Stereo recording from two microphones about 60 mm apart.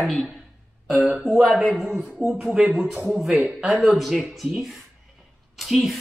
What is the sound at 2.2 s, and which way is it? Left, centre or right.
A woman's voice, centre.